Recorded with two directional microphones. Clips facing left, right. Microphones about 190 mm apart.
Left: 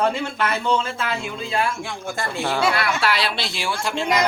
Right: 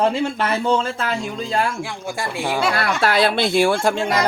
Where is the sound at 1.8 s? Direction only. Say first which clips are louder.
Right 2 dB; 10° right (ahead or behind).